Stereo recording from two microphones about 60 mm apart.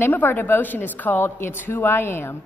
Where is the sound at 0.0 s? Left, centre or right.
Left.